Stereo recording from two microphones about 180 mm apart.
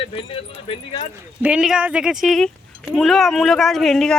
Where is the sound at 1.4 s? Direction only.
5° right (ahead or behind).